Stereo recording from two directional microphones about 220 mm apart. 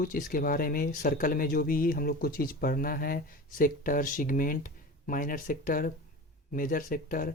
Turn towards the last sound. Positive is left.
turn(degrees=40)  # may be behind; listen again after turning